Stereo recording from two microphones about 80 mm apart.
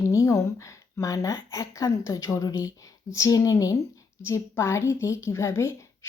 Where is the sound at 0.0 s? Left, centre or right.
Left.